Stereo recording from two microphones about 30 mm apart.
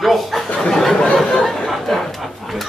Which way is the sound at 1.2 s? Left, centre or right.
Centre.